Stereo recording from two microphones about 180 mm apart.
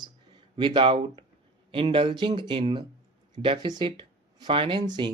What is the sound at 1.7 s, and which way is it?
Speech, 30° right (ahead or behind).